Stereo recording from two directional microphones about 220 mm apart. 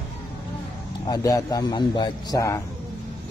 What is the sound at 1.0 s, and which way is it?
A man's voice, 15° left (ahead or behind).